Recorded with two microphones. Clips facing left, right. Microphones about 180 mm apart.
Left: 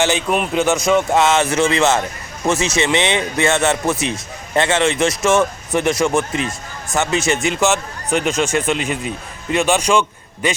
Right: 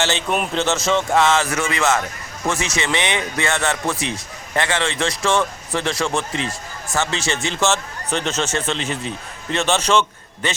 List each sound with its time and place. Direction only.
0.0 s speech: 15° left (ahead or behind)